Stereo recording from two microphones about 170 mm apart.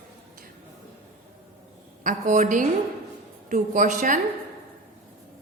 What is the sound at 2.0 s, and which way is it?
A woman's voice, 50° right (ahead or behind).